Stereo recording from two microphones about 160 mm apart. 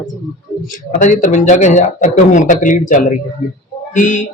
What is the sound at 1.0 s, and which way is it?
A man's voice, 55° left (ahead or behind).